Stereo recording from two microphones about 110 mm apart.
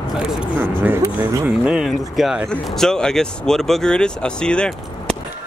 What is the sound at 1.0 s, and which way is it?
Speech, 30° right (ahead or behind).